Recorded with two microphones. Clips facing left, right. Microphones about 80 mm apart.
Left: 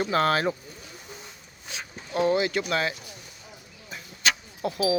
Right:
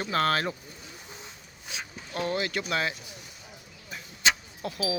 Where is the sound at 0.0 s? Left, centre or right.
Centre.